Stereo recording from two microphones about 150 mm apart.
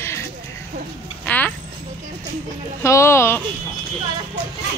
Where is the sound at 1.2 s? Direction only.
10° left (ahead or behind).